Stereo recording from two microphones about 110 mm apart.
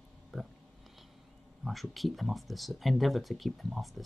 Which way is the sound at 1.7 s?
Centre (ahead or behind).